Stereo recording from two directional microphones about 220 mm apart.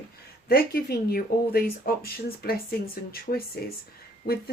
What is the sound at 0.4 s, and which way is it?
Speech, 45° left (ahead or behind).